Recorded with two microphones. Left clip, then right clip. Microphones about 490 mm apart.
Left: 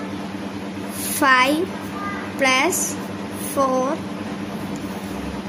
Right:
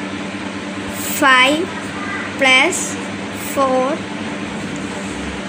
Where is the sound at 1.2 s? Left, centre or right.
Left.